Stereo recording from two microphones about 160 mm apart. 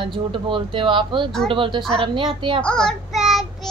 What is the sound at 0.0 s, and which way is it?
A woman's voice, 30° right (ahead or behind).